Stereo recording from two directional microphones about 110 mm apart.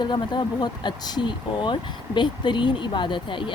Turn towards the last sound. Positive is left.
turn(degrees=50)  # may be behind; listen again after turning